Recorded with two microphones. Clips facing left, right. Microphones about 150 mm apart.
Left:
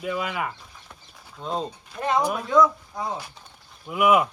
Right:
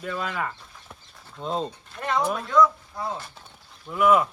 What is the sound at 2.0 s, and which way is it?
Speech, 20° left (ahead or behind).